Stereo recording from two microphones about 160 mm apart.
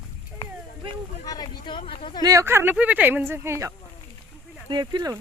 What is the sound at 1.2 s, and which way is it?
Speech, 25° left (ahead or behind).